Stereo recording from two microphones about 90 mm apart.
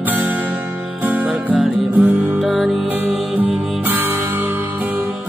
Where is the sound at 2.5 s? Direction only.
5° right (ahead or behind).